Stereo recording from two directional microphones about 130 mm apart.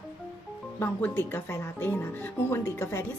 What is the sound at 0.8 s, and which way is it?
Speech, 15° left (ahead or behind).